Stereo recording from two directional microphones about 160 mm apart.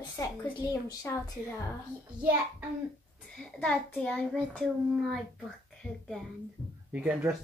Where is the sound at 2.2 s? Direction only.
10° right (ahead or behind).